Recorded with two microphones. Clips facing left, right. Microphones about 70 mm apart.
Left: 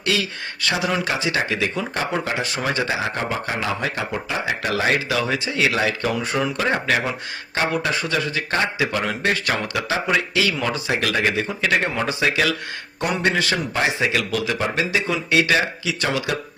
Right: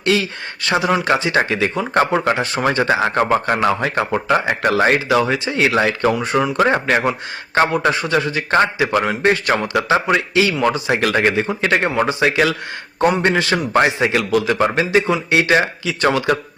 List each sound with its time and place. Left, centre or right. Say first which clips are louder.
0.0 s a man's voice: right 5 dB; right
1.4 s speech: right 5 dB; right
2.3 s a man's voice: right 5 dB; right
2.7 s speech: right 7 dB; right
5.2 s a man's voice: right 4 dB; right
5.5 s a man's voice: right 5 dB; right